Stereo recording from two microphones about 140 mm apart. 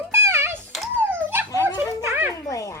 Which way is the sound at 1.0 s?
15° right (ahead or behind).